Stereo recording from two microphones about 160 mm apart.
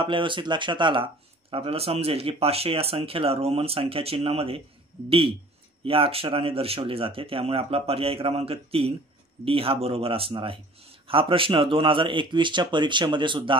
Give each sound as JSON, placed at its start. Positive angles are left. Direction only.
{"t": 0.0, "sound": "speech", "side_deg": -30}
{"t": 5.9, "sound": "speech", "side_deg": -35}